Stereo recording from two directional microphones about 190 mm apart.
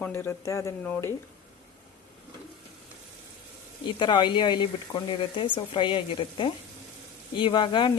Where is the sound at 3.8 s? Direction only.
25° left (ahead or behind).